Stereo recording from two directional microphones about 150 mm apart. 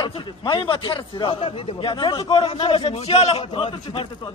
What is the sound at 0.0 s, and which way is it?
A man's voice, 35° left (ahead or behind).